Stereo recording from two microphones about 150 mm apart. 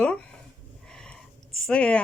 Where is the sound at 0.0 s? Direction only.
10° left (ahead or behind).